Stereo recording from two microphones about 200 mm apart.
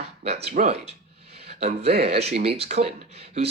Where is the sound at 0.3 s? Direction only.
30° right (ahead or behind).